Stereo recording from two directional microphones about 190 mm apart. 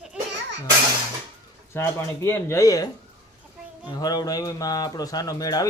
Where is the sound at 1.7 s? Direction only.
15° left (ahead or behind).